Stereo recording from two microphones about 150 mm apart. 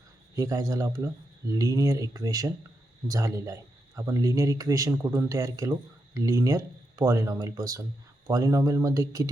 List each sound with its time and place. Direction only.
0.3 s speech: 20° right (ahead or behind)